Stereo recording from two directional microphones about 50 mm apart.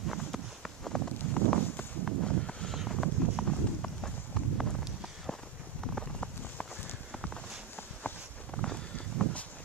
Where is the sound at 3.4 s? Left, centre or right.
Centre.